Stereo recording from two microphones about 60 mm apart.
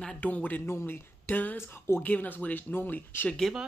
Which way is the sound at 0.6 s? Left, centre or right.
Left.